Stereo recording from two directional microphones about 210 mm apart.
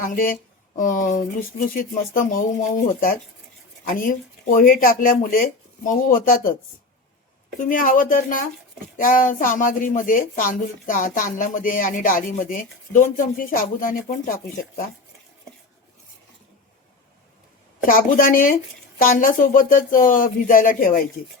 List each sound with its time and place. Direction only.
0.0 s speech: 40° left (ahead or behind)
3.8 s speech: 40° left (ahead or behind)
7.7 s speech: 40° left (ahead or behind)
17.8 s speech: 40° left (ahead or behind)